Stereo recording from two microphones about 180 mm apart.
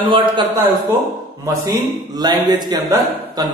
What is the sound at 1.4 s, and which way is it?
A man's voice, 20° right (ahead or behind).